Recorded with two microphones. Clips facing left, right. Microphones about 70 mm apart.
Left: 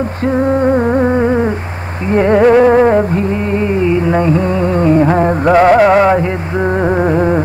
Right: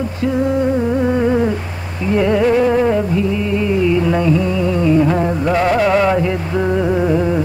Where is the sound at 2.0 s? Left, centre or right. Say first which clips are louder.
Left 5 dB; left.